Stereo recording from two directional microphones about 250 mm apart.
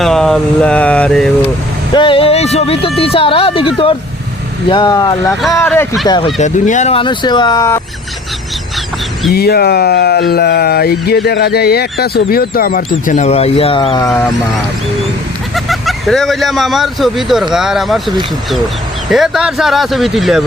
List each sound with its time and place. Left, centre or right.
0.0 s mantra: centre
2.0 s a sound: left
4.7 s speech: centre
6.1 s speech: centre
9.3 s speech: left; by 14.3 s centre
15.5 s speech: centre
19.1 s speech: centre